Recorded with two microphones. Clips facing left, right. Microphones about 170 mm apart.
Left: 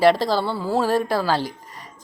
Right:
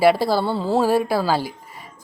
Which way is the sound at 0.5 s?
25° right (ahead or behind).